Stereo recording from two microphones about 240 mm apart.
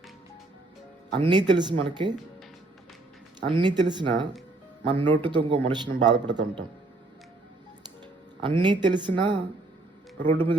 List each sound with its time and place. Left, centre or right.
1.1 s speech: centre
3.4 s speech: centre
8.4 s speech: centre